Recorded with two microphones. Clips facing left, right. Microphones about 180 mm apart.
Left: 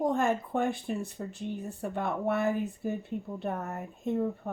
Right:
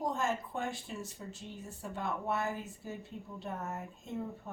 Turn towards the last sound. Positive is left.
turn(degrees=60)  # may be behind; listen again after turning